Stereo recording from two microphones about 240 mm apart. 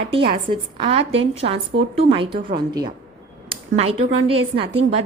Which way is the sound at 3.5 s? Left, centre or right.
Right.